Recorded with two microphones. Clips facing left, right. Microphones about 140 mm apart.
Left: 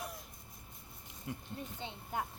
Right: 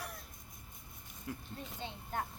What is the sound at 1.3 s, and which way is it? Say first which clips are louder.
Speech: left 1 dB; 20° left (ahead or behind).